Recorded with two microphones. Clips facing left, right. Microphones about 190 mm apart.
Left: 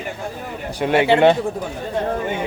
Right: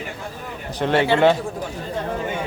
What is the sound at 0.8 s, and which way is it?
Speech, 10° left (ahead or behind).